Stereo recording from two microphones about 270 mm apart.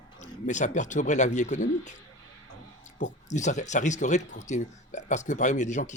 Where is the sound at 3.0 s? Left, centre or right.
Left.